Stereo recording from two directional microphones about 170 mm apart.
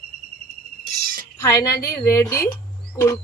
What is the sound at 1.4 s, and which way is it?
A woman's voice, 20° left (ahead or behind).